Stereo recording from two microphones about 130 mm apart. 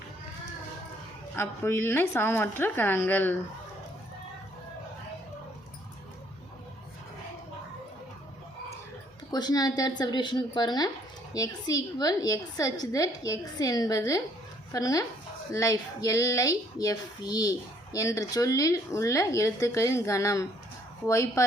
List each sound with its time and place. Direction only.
1.4 s a woman's voice: 20° left (ahead or behind)
9.3 s a woman's voice: 30° left (ahead or behind)